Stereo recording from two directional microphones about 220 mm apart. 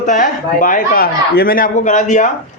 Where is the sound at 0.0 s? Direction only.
35° left (ahead or behind).